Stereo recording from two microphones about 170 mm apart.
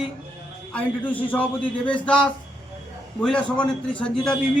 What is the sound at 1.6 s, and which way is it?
Speech, 30° left (ahead or behind).